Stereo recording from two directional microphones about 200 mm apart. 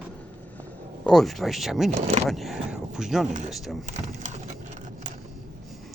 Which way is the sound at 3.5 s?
Centre (ahead or behind).